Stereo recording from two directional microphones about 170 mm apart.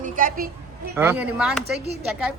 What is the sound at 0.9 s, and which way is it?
Speech, 10° right (ahead or behind).